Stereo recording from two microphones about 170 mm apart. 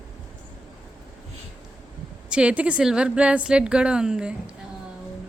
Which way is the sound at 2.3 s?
5° right (ahead or behind).